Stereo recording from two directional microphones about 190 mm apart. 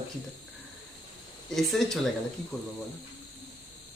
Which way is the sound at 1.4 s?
Centre (ahead or behind).